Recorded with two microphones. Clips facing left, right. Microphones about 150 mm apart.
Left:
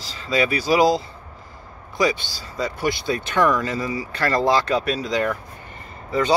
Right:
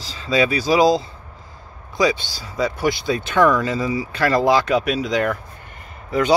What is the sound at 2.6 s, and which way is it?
Speech, 90° right.